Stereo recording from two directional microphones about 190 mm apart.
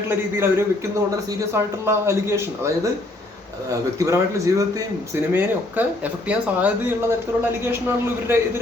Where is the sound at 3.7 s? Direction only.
15° right (ahead or behind).